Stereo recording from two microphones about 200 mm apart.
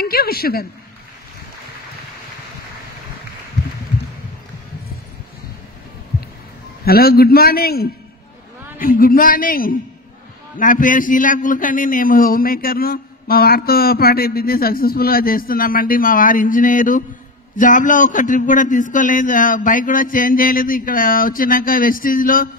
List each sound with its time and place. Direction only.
0.0 s a woman's voice: 50° left (ahead or behind)
6.8 s a man's voice: 50° left (ahead or behind)